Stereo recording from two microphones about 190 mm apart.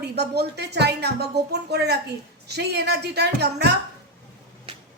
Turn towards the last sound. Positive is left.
turn(degrees=-60)  # may be behind; listen again after turning